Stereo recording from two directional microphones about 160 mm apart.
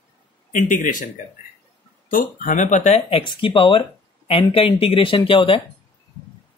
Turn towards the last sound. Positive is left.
turn(degrees=35)  # may be behind; listen again after turning